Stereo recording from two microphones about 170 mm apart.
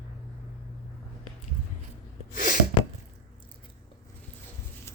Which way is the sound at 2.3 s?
50° left (ahead or behind).